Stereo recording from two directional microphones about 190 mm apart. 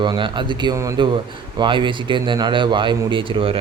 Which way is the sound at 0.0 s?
25° right (ahead or behind).